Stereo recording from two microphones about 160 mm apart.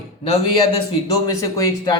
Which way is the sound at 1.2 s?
20° left (ahead or behind).